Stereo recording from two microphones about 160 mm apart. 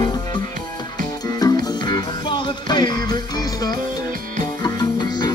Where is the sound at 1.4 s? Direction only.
25° left (ahead or behind).